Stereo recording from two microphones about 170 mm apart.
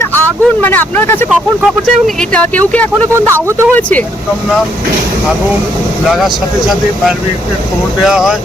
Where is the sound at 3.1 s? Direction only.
15° right (ahead or behind).